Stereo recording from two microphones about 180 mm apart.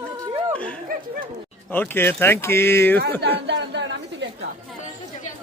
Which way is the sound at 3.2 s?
70° right (ahead or behind).